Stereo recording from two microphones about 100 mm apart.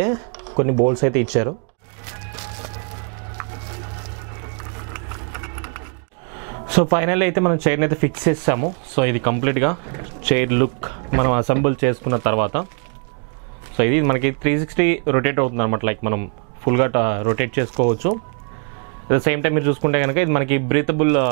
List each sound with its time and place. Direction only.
0.0 s speech: 25° right (ahead or behind)
2.0 s music: 10° right (ahead or behind)
3.3 s wood: 10° right (ahead or behind)
4.4 s sewing machine: 10° right (ahead or behind)
6.7 s speech: 15° right (ahead or behind)
13.7 s speech: 20° right (ahead or behind)